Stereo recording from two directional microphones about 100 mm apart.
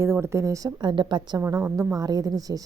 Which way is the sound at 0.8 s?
50° right (ahead or behind).